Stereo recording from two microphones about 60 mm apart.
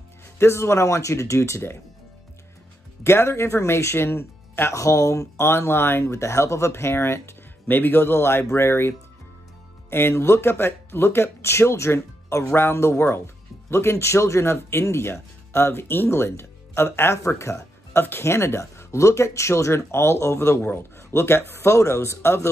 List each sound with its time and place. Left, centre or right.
0.4 s speech: left
3.0 s speech: left
4.7 s speech: left
5.4 s speech: left
17.2 s speech: left